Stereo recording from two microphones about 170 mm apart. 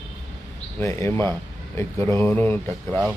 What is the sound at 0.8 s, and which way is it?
Speech, 15° left (ahead or behind).